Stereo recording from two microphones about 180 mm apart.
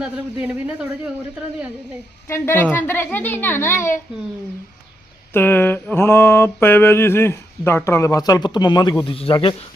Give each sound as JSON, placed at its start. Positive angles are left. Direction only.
{"t": 0.0, "sound": "speech", "side_deg": -10}
{"t": 2.2, "sound": "mantra", "side_deg": 15}
{"t": 5.3, "sound": "mantra", "side_deg": 10}
{"t": 9.0, "sound": "speech", "side_deg": 30}